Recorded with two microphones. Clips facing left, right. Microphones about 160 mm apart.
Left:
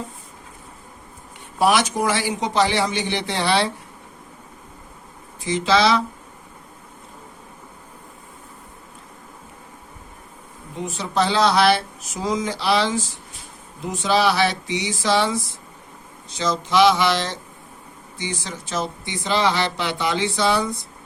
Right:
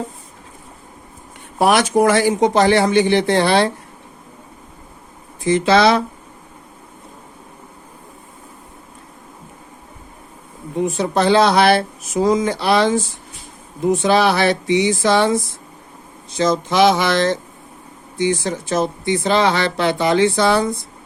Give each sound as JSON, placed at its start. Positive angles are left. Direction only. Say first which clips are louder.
{"t": 1.5, "sound": "speech", "louder": "right 5 dB", "side_deg": -55}
{"t": 5.5, "sound": "speech", "louder": "right 5 dB", "side_deg": -55}
{"t": 10.8, "sound": "speech", "louder": "right 5 dB", "side_deg": -55}
{"t": 16.4, "sound": "speech", "louder": "right 3 dB", "side_deg": -50}